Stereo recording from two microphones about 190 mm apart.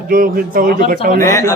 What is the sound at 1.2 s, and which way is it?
Speech, 15° left (ahead or behind).